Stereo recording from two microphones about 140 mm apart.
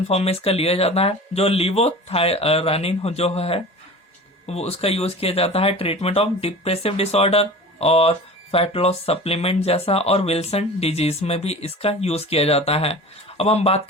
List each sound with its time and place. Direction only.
0.1 s speech: 45° left (ahead or behind)